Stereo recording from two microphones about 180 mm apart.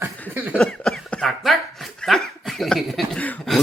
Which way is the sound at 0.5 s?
5° left (ahead or behind).